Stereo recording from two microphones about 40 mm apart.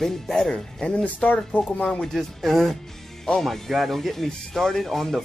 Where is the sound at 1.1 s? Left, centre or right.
Left.